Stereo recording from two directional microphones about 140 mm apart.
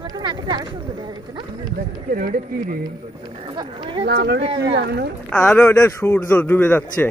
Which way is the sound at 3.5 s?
35° right (ahead or behind).